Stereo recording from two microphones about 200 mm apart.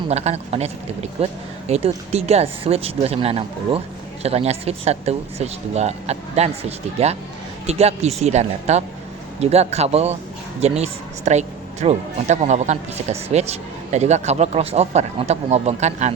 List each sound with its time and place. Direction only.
0.1 s speech: 35° right (ahead or behind)